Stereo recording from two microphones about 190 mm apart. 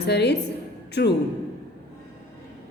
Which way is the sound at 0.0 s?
60° left (ahead or behind).